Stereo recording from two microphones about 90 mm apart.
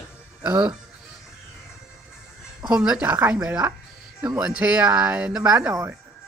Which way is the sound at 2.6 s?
10° right (ahead or behind).